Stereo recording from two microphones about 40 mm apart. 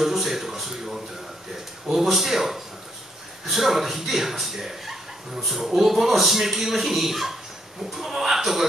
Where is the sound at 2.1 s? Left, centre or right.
Centre.